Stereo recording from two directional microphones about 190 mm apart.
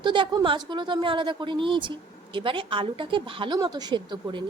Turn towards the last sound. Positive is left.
turn(degrees=-25)  # may be behind; listen again after turning